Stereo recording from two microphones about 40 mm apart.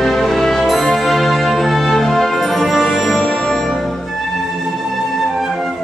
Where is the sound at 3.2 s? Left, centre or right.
Centre.